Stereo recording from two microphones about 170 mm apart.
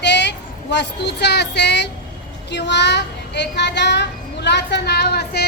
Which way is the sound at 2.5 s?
90° left.